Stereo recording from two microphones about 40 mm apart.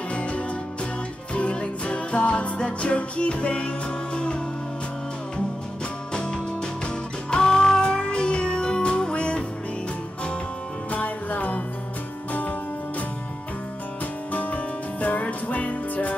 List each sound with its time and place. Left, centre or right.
0.1 s music: left
6.1 s music: left
10.9 s music: left
14.3 s music: left